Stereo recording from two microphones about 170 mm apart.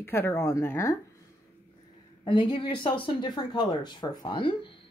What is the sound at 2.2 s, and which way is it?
Speech, 30° left (ahead or behind).